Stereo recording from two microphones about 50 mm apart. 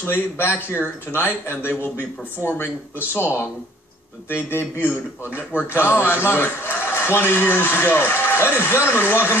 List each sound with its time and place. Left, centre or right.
0.0 s a man's voice: left